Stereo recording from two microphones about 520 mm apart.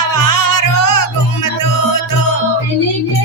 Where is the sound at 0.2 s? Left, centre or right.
Left.